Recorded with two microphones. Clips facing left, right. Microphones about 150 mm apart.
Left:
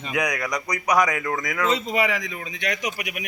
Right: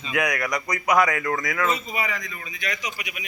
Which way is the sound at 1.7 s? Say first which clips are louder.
Left 6 dB; 90° left.